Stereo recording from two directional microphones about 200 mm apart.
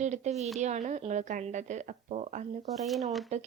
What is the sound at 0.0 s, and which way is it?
Speech, 35° right (ahead or behind).